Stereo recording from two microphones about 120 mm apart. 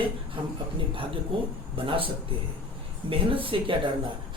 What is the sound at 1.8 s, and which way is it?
Speech, 45° right (ahead or behind).